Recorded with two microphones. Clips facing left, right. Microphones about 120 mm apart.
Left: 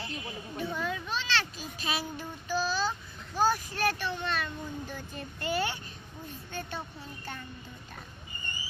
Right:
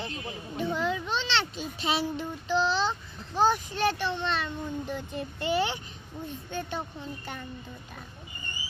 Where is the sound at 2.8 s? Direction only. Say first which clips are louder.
Right 2 dB; 20° right (ahead or behind).